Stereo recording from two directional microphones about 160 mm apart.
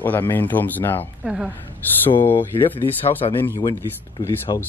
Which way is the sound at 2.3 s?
30° left (ahead or behind).